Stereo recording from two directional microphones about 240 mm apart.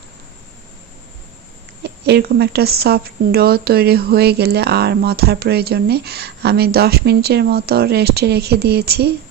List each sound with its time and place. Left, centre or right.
1.8 s a woman's voice: right